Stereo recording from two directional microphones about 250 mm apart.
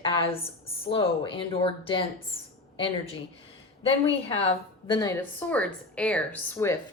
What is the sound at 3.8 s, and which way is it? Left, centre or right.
A woman's voice, left.